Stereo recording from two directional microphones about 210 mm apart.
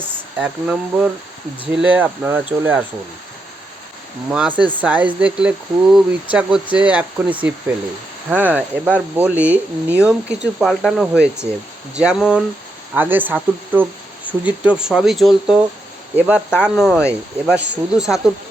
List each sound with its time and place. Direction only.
0.3 s speech: 5° right (ahead or behind)
4.3 s speech: 5° right (ahead or behind)
4.5 s speech: 25° right (ahead or behind)
4.8 s speech: 5° right (ahead or behind)